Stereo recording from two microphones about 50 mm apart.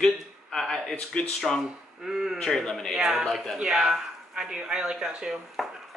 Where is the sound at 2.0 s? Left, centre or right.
Centre.